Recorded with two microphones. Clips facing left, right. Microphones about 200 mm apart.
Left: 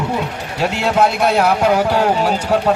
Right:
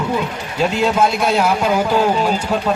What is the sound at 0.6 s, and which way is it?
Speech, 70° left (ahead or behind).